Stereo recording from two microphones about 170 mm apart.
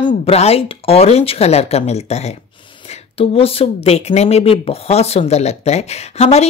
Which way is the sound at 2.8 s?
35° left (ahead or behind).